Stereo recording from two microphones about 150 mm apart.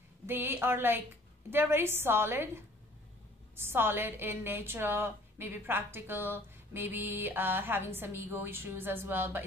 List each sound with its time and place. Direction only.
0.3 s a woman's voice: 15° right (ahead or behind)